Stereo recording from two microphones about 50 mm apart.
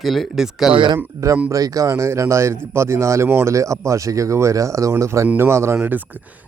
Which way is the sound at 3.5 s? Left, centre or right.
Right.